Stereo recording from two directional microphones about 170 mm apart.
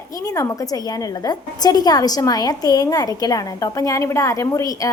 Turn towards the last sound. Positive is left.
turn(degrees=20)  # may be behind; listen again after turning